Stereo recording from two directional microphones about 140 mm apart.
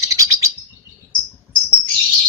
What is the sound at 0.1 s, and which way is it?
Chirp, 25° right (ahead or behind).